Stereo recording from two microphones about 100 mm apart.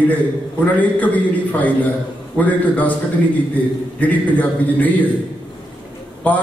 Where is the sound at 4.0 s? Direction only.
15° left (ahead or behind).